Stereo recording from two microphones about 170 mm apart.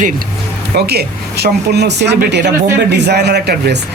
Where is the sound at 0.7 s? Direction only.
70° right (ahead or behind).